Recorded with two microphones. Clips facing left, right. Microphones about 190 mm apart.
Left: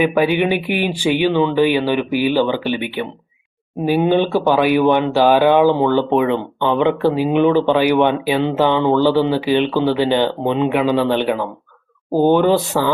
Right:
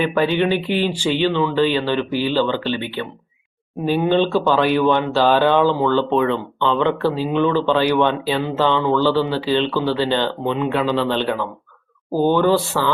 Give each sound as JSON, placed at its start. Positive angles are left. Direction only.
{"t": 0.0, "sound": "speech", "side_deg": 15}